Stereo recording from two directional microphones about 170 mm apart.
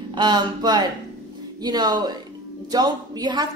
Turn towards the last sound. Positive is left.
turn(degrees=-25)  # may be behind; listen again after turning